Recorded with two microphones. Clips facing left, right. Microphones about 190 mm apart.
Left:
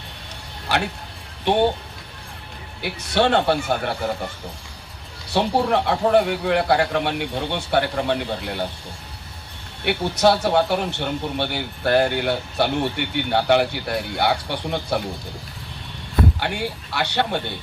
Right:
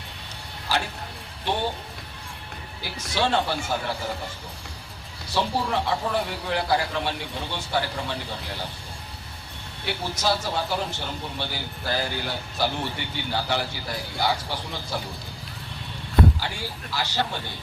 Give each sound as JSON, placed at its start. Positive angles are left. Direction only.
{"t": 1.5, "sound": "a man's voice", "side_deg": 65}
{"t": 2.8, "sound": "a man's voice", "side_deg": 65}
{"t": 5.3, "sound": "a man's voice", "side_deg": 65}
{"t": 9.8, "sound": "a man's voice", "side_deg": 65}
{"t": 16.4, "sound": "a man's voice", "side_deg": 65}